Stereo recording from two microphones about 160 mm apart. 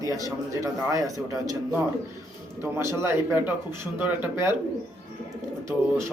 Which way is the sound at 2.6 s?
15° right (ahead or behind).